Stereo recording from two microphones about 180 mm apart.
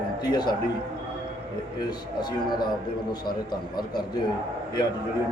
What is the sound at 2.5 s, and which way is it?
A man's voice, 25° left (ahead or behind).